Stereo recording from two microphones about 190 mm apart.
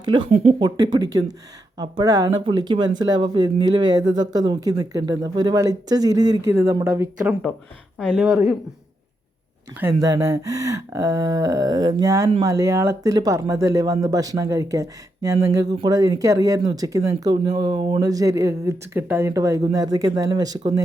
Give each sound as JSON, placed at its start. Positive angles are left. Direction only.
{"t": 0.0, "sound": "speech", "side_deg": -25}
{"t": 0.9, "sound": "speech", "side_deg": -20}
{"t": 9.8, "sound": "speech", "side_deg": -15}